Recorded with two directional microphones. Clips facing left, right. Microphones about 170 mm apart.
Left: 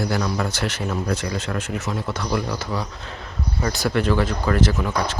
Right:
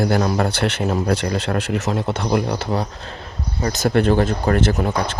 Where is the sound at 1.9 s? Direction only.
25° right (ahead or behind).